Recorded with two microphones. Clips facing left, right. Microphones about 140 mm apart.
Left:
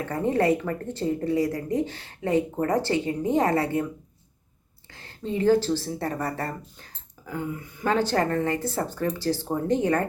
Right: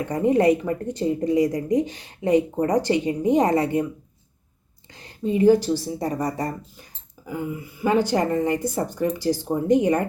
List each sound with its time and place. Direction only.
0.0 s speech: 15° right (ahead or behind)
4.9 s speech: 15° right (ahead or behind)